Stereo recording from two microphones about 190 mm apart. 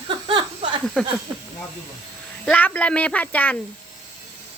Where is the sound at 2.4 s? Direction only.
5° left (ahead or behind).